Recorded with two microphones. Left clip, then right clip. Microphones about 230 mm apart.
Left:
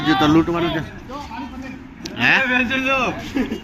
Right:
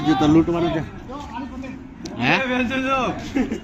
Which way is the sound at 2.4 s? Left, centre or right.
Right.